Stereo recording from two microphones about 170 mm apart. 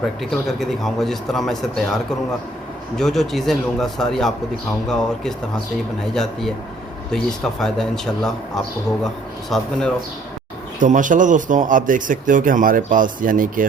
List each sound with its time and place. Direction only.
0.2 s speech: centre (ahead or behind)
3.0 s speech: centre (ahead or behind)
7.1 s speech: 5° left (ahead or behind)
10.8 s speech: 50° right (ahead or behind)